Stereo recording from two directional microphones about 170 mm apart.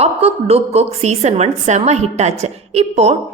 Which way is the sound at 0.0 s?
35° right (ahead or behind).